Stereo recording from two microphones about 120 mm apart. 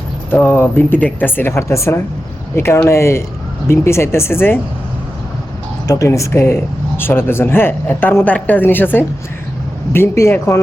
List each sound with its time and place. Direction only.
0.3 s speech: 15° left (ahead or behind)
5.9 s speech: 25° left (ahead or behind)